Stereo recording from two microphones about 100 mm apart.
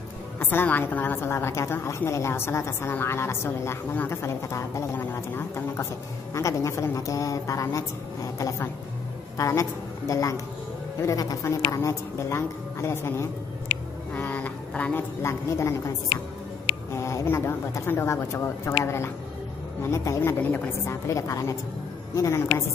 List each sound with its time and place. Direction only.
0.4 s a woman's voice: 20° left (ahead or behind)
14.1 s a sound: 15° left (ahead or behind)
15.2 s a woman's voice: 30° left (ahead or behind)
17.0 s a woman's voice: 30° left (ahead or behind)
19.8 s a woman's voice: 25° left (ahead or behind)